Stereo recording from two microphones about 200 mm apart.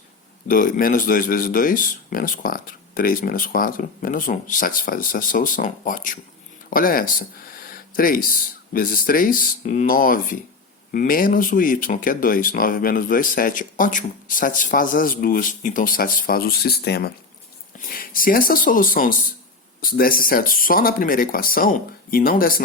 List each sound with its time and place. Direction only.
0.4 s speech: 40° left (ahead or behind)